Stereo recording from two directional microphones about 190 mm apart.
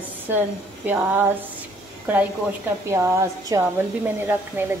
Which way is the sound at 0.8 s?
10° right (ahead or behind).